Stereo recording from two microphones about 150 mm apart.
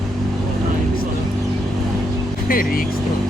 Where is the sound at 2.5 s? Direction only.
70° left (ahead or behind).